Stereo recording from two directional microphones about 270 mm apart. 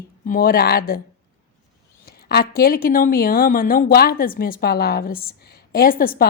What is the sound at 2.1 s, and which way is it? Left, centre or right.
Speech, left.